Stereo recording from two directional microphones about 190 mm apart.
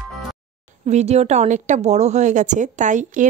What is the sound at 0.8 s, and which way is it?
A woman's voice, 35° right (ahead or behind).